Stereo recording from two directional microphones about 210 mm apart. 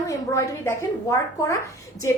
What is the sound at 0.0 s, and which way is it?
Speech, 15° left (ahead or behind).